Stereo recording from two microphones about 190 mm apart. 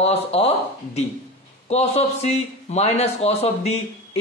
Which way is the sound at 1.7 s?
35° left (ahead or behind).